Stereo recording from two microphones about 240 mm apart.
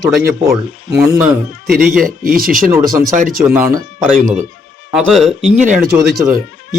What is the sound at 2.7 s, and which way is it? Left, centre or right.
Speech, centre.